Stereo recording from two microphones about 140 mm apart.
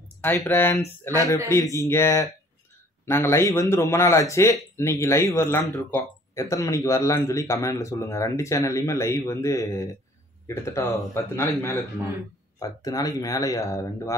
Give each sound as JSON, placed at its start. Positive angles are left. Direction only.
{"t": 0.2, "sound": "speech", "side_deg": 15}